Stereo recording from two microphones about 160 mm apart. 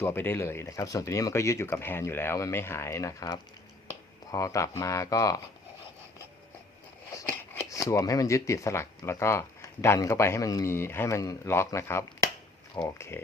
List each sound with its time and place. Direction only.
0.0 s speech: 15° left (ahead or behind)
7.3 s speech: 15° left (ahead or behind)